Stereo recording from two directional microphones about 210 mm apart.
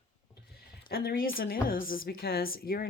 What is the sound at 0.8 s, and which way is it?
Speech, 45° left (ahead or behind).